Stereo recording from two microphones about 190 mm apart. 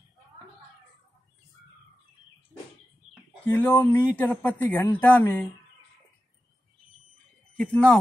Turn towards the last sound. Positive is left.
turn(degrees=5)  # may be behind; listen again after turning